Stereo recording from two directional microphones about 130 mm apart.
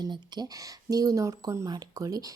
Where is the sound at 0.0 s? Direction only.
30° right (ahead or behind).